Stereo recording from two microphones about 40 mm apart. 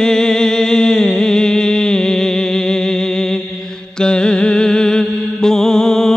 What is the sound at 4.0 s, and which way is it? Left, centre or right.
Mantra, left.